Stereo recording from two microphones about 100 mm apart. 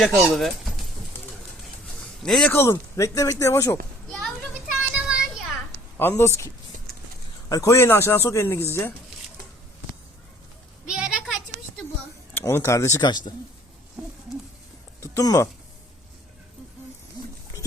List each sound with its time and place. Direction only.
0.0 s speech: centre (ahead or behind)
2.0 s a sound: 5° left (ahead or behind)
2.5 s speech: 25° left (ahead or behind)
4.7 s a sound: 10° right (ahead or behind)
6.0 s speech: 25° left (ahead or behind)
7.5 s speech: 30° left (ahead or behind)
10.8 s a sound: 5° right (ahead or behind)
12.3 s speech: 25° left (ahead or behind)
13.0 s a man's voice: 45° left (ahead or behind)
15.0 s speech: 30° left (ahead or behind)